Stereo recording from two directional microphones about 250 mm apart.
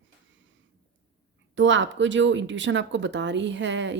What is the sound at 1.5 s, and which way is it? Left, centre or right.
Speech, right.